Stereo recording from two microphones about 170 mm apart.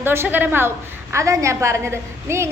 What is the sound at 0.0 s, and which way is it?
A woman's voice, 15° right (ahead or behind).